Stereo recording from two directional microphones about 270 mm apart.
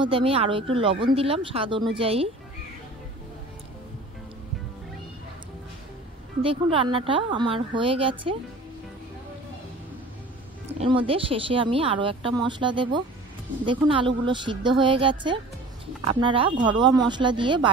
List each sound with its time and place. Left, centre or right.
0.0 s a woman's voice: centre
6.4 s a woman's voice: centre
10.8 s a woman's voice: centre